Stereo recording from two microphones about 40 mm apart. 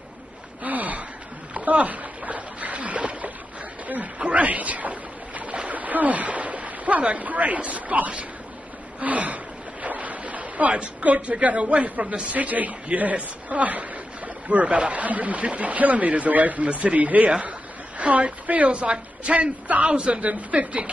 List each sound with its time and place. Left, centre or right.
0.7 s gasp: right
1.5 s splash: right
3.8 s a sound: right
9.0 s a woman's voice: right